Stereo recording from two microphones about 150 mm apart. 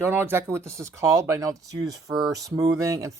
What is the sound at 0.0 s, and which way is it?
Speech, 15° right (ahead or behind).